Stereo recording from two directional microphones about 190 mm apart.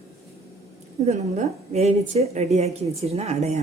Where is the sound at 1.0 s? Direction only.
35° right (ahead or behind).